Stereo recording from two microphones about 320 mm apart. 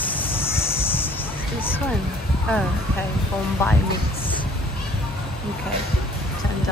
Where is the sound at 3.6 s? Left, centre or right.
Centre.